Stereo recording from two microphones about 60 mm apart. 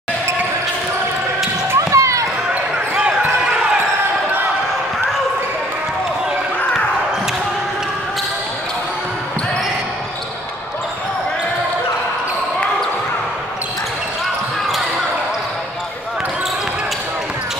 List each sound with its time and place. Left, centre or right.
1.8 s basketball bounce: right
3.0 s basketball bounce: centre